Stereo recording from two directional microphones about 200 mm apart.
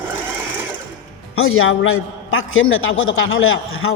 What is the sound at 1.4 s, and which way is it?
A man's voice, 90° left.